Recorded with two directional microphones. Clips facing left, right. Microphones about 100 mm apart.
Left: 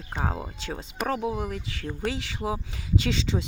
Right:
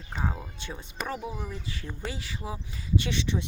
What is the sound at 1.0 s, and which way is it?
Speech, 75° left (ahead or behind).